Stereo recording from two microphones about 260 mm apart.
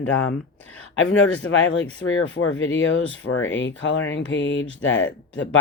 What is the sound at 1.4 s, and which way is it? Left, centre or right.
Speech, left.